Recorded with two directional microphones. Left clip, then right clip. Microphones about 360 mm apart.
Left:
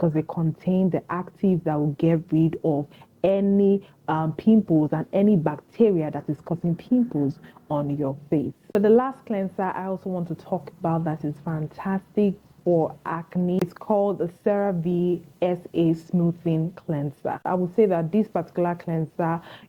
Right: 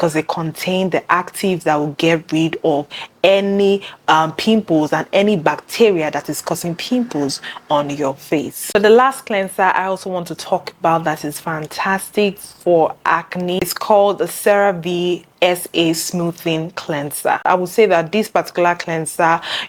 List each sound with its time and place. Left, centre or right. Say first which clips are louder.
0.0 s speech: right 8 dB; centre
2.6 s speech: right 8 dB; right
2.9 s speech: right 9 dB; centre